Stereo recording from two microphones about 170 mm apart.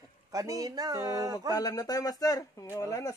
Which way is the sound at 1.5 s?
20° left (ahead or behind).